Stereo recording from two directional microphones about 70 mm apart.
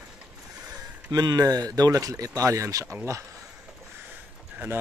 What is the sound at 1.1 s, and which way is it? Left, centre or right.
Speech, right.